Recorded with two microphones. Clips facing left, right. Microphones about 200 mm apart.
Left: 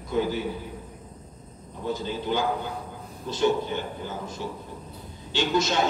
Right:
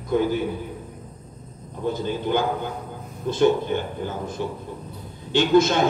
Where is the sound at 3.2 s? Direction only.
55° right (ahead or behind).